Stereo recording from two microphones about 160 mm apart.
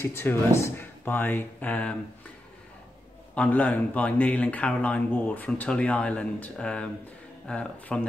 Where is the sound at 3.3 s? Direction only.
10° left (ahead or behind).